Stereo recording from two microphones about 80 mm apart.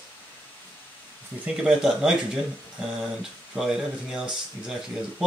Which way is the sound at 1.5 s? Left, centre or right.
Centre.